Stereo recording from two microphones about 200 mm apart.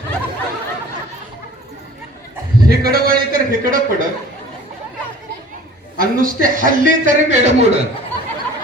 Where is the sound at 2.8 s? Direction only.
50° right (ahead or behind).